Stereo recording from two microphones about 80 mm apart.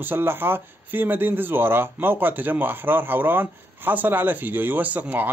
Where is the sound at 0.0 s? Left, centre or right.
Right.